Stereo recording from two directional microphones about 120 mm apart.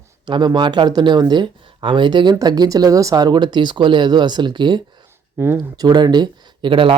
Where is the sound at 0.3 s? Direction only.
40° right (ahead or behind).